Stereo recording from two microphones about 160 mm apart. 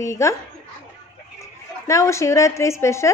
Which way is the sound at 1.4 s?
20° left (ahead or behind).